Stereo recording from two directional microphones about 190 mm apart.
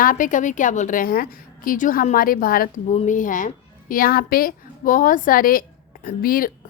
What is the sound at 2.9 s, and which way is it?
A woman's voice, 35° left (ahead or behind).